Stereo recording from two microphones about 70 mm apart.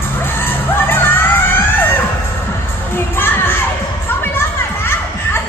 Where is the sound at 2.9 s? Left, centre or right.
Left.